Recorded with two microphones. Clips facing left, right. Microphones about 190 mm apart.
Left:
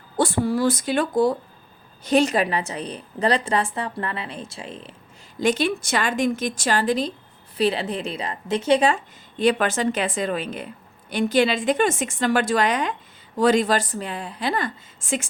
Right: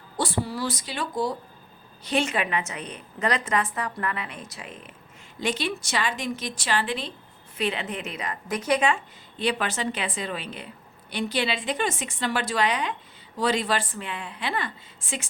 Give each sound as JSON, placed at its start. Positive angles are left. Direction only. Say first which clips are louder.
{"t": 0.2, "sound": "a woman's voice", "louder": "left 7 dB", "side_deg": 50}
{"t": 2.0, "sound": "a woman's voice", "louder": "left 7 dB", "side_deg": 40}
{"t": 5.4, "sound": "a woman's voice", "louder": "left 7 dB", "side_deg": 45}
{"t": 9.4, "sound": "a woman's voice", "louder": "left 7 dB", "side_deg": 45}